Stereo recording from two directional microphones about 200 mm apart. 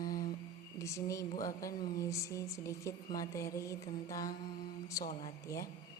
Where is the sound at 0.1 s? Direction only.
45° left (ahead or behind).